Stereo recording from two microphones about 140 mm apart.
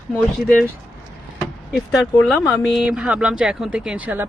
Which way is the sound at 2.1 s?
5° right (ahead or behind).